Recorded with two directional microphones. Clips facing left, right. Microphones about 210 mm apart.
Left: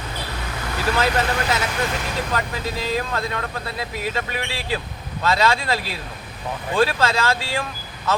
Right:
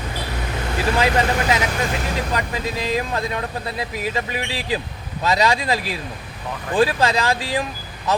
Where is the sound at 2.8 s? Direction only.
15° right (ahead or behind).